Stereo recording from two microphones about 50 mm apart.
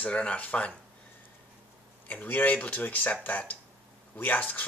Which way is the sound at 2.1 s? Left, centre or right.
Left.